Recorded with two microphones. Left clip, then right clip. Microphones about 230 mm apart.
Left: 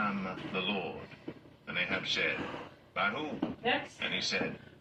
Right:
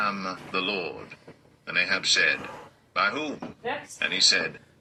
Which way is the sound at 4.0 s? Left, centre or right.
Right.